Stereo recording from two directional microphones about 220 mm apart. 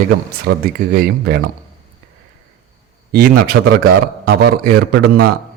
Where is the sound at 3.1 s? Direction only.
40° right (ahead or behind).